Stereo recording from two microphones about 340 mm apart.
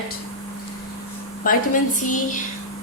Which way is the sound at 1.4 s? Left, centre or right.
Left.